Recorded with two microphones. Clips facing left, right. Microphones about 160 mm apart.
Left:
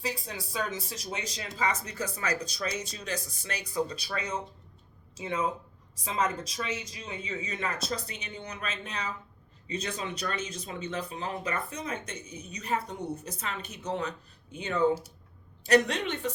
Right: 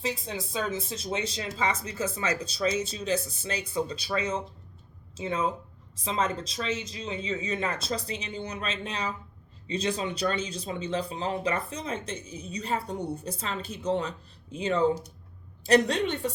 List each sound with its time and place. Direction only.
0.0 s speech: 25° right (ahead or behind)